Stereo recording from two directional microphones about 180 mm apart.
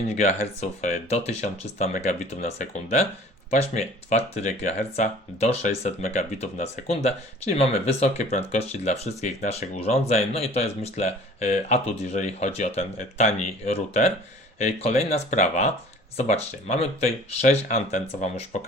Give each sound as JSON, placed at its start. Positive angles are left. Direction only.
{"t": 0.1, "sound": "speech", "side_deg": 40}